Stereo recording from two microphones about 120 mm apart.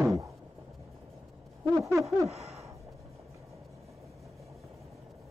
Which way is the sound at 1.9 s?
25° right (ahead or behind).